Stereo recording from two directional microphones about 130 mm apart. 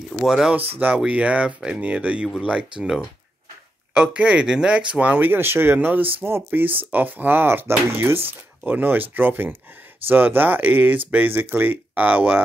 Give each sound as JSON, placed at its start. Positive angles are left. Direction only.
{"t": 0.2, "sound": "speech", "side_deg": 0}